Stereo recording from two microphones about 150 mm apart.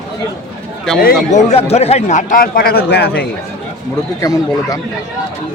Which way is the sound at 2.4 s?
90° left.